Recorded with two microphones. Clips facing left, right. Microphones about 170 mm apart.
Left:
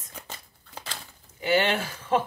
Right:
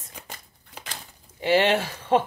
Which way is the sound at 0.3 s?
15° right (ahead or behind).